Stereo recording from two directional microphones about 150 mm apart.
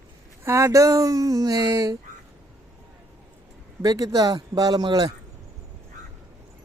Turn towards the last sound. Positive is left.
turn(degrees=-25)  # may be behind; listen again after turning